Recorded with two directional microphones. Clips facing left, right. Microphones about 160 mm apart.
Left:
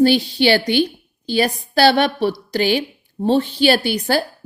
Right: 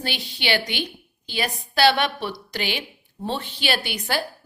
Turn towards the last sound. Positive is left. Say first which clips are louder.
# left 9 dB
turn(degrees=35)  # may be behind; listen again after turning